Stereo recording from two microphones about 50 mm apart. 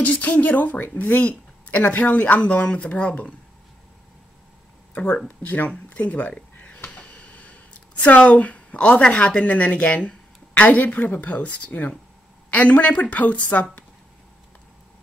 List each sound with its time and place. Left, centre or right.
0.0 s speech: left
4.9 s speech: left
5.9 s a sound: left
7.0 s speech: left